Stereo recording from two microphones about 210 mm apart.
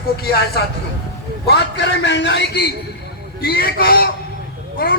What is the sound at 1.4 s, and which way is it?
A man's voice, 55° left (ahead or behind).